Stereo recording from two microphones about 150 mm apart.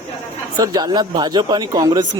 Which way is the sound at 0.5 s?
25° right (ahead or behind).